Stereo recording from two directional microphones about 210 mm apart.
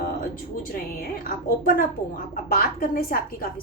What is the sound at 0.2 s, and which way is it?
A woman's voice, 45° left (ahead or behind).